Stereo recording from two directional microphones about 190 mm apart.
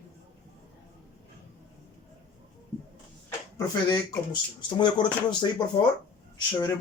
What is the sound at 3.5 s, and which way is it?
Speech, 20° left (ahead or behind).